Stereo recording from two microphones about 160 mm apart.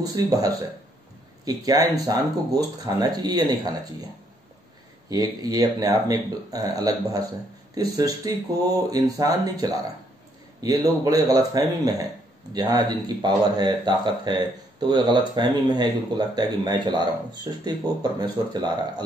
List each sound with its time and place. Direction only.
0.0 s speech: 20° right (ahead or behind)
5.1 s speech: 25° right (ahead or behind)